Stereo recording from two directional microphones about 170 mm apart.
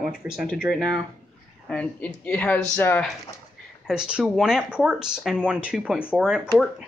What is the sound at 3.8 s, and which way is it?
Speech, 5° right (ahead or behind).